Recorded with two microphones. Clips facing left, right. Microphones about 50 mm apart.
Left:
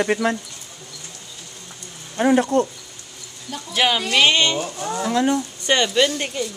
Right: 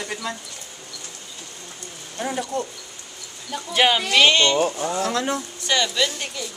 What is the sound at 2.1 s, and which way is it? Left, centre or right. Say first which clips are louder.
Speech: left 9 dB; left.